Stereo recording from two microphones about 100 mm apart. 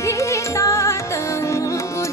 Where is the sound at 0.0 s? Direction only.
30° left (ahead or behind).